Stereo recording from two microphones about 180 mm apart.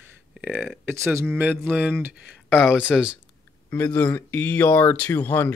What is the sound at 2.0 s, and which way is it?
Speech, 5° right (ahead or behind).